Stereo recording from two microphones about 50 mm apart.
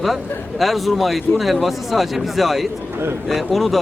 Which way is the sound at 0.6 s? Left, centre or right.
Centre.